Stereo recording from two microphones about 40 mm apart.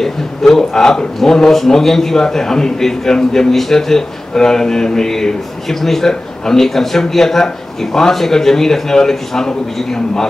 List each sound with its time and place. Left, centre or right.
0.0 s a man's voice: centre